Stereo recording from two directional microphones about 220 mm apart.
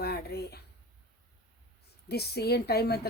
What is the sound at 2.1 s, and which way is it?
A woman's voice, 45° left (ahead or behind).